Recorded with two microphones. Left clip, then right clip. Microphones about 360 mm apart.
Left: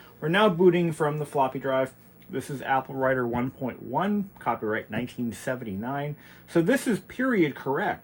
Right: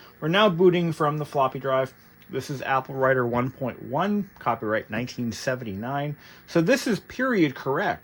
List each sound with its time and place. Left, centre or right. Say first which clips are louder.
0.2 s speech: right 2 dB; right